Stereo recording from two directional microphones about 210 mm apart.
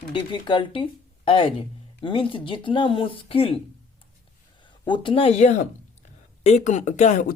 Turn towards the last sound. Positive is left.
turn(degrees=35)  # may be behind; listen again after turning